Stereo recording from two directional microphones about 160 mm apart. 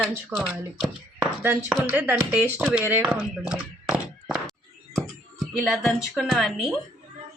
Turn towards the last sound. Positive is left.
turn(degrees=0)  # may be behind; listen again after turning